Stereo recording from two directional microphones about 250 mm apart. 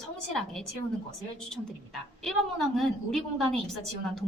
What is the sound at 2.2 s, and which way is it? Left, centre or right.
A woman's voice, centre.